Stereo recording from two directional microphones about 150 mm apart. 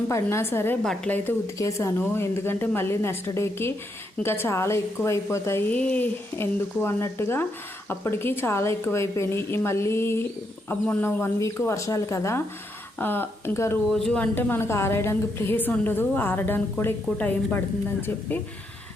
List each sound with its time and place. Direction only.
0.1 s a woman's voice: 15° left (ahead or behind)
0.8 s a woman's voice: 5° left (ahead or behind)
13.9 s a woman's voice: 5° left (ahead or behind)